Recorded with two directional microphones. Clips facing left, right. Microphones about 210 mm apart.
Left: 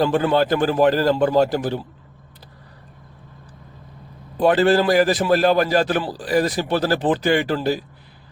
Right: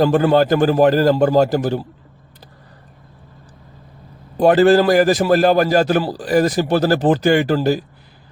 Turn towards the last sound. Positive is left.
turn(degrees=-45)  # may be behind; listen again after turning